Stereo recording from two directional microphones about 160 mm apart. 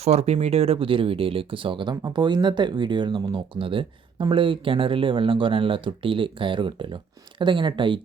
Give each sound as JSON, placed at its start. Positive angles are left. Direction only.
{"t": 0.0, "sound": "speech", "side_deg": -40}